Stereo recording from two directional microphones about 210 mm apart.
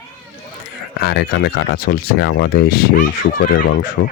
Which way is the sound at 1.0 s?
50° left (ahead or behind).